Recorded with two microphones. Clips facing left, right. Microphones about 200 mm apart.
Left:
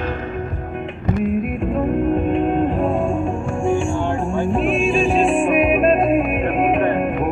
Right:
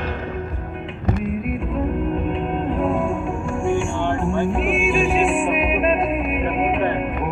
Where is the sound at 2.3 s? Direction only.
45° left (ahead or behind).